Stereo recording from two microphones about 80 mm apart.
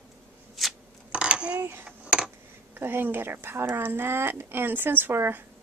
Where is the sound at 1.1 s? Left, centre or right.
Centre.